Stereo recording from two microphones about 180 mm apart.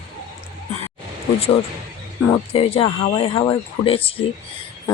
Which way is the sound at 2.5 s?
30° left (ahead or behind).